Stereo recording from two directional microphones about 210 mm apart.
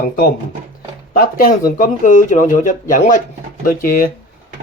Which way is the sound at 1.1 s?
45° left (ahead or behind).